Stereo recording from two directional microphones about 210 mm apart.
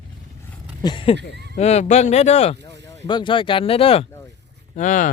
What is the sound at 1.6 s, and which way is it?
Speech, 30° left (ahead or behind).